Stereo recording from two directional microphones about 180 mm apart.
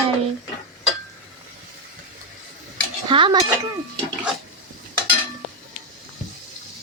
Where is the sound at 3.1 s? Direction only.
25° right (ahead or behind).